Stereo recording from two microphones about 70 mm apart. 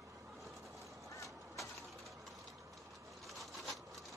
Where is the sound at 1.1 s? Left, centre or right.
Left.